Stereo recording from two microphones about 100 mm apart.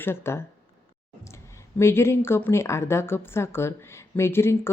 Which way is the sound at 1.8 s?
25° left (ahead or behind).